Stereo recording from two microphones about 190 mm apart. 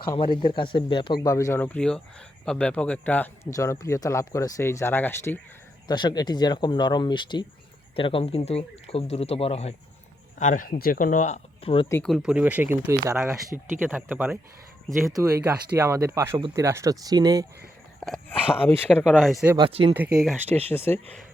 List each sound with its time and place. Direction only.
0.1 s a man's voice: 25° left (ahead or behind)
5.9 s speech: 20° left (ahead or behind)
10.3 s speech: 45° left (ahead or behind)
12.0 s speech: centre (ahead or behind)
13.5 s speech: centre (ahead or behind); by 17.4 s 20° right (ahead or behind)
18.0 s a man's voice: 5° left (ahead or behind)
19.5 s speech: 25° right (ahead or behind)
20.1 s a man's voice: centre (ahead or behind)